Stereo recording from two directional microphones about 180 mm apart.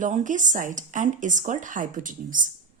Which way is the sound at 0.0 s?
45° right (ahead or behind).